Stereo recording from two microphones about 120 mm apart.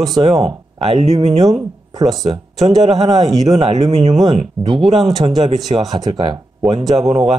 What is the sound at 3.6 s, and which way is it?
Speech, 60° right (ahead or behind).